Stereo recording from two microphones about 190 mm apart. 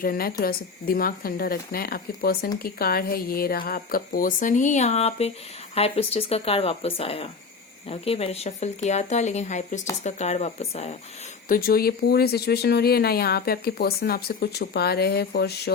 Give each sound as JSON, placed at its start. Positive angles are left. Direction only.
{"t": 0.0, "sound": "speech", "side_deg": 50}
{"t": 11.4, "sound": "speech", "side_deg": 50}